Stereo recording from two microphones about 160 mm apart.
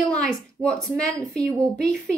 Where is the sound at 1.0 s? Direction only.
20° right (ahead or behind).